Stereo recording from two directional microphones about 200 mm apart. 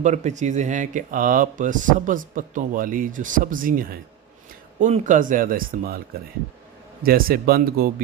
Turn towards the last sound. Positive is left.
turn(degrees=-50)  # may be behind; listen again after turning